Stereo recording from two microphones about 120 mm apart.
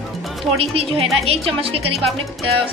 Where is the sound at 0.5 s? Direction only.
55° right (ahead or behind).